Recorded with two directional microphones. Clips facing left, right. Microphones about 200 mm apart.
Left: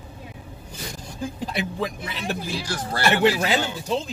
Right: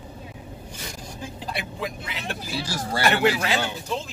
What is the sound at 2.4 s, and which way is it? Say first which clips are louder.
Speech: left 1 dB; 5° right (ahead or behind).